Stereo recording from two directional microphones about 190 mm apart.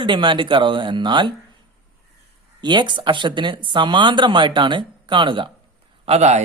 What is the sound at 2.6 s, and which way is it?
Speech, 25° right (ahead or behind).